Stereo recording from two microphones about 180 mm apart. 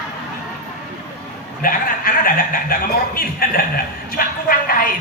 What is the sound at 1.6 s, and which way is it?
A man's voice, 50° left (ahead or behind).